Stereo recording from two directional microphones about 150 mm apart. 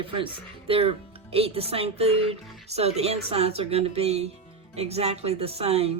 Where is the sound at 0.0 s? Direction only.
35° right (ahead or behind).